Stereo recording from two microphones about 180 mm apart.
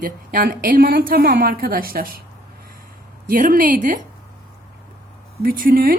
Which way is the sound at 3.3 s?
50° right (ahead or behind).